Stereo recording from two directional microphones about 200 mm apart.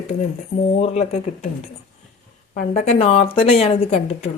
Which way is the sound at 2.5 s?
30° left (ahead or behind).